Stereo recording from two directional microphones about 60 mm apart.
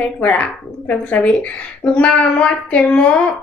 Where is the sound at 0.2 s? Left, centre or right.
Left.